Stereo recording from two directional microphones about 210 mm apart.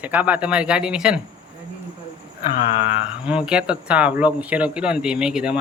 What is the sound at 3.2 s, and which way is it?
Speech, 5° right (ahead or behind).